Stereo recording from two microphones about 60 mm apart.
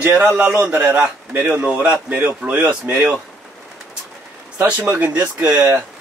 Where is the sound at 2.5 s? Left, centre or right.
Right.